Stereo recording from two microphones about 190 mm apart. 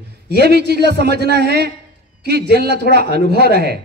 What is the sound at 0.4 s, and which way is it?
Speech, 60° right (ahead or behind).